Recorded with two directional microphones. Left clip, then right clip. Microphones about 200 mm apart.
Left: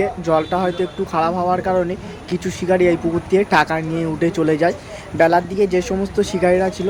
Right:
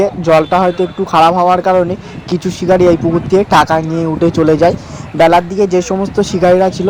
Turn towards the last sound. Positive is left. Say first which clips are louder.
# right 7 dB
turn(degrees=-20)  # may be behind; listen again after turning